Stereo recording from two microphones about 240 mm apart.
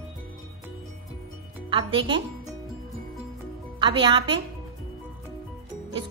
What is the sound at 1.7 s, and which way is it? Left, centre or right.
Speech, right.